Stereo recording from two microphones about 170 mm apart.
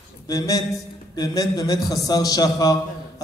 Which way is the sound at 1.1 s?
20° left (ahead or behind).